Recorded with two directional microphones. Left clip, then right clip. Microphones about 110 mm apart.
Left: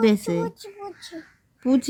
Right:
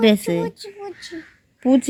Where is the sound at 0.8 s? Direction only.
35° left (ahead or behind).